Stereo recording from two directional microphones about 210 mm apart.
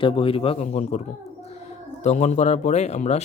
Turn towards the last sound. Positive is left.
turn(degrees=30)  # may be behind; listen again after turning